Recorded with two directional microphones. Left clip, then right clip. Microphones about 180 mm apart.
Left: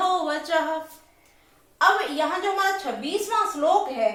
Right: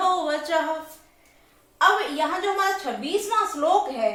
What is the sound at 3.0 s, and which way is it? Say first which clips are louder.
Speech: right 1 dB; 10° right (ahead or behind).